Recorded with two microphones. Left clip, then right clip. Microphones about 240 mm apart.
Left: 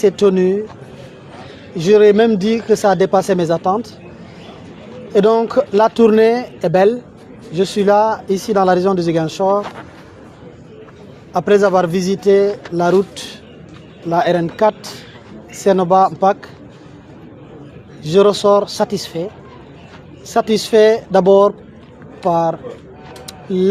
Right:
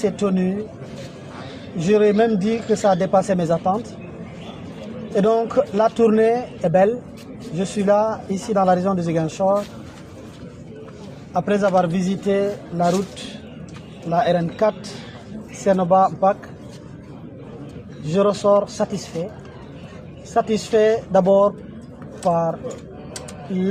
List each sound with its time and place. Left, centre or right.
0.0 s speech: left
1.8 s speech: left
5.1 s speech: left
11.3 s speech: left
18.1 s speech: left
20.3 s speech: left